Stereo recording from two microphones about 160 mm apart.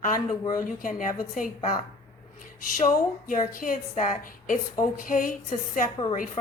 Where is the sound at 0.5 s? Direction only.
60° left (ahead or behind).